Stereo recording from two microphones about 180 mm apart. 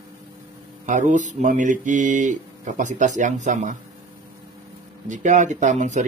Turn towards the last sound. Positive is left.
turn(degrees=-40)  # may be behind; listen again after turning